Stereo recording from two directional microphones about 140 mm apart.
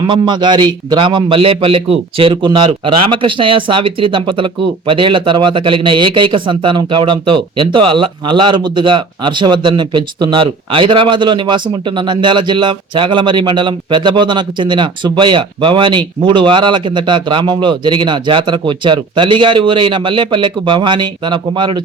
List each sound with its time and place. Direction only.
0.1 s a man's voice: 35° right (ahead or behind)